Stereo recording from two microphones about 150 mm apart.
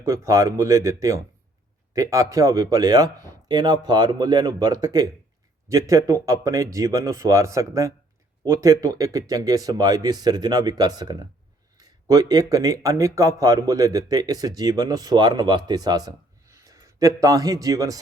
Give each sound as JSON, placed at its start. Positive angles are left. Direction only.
{"t": 0.0, "sound": "speech", "side_deg": -20}